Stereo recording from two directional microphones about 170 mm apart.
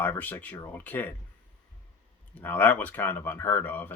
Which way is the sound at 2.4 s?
10° left (ahead or behind).